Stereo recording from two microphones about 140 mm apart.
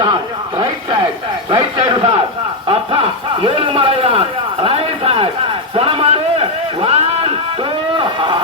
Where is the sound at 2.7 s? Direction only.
40° right (ahead or behind).